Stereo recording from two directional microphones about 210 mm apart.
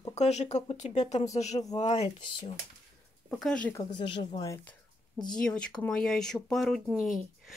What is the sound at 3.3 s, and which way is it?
Speech, 5° left (ahead or behind).